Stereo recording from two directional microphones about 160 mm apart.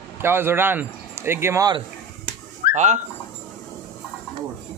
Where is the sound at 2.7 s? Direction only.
50° right (ahead or behind).